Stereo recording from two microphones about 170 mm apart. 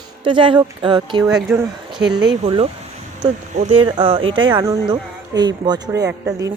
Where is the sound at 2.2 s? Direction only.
30° right (ahead or behind).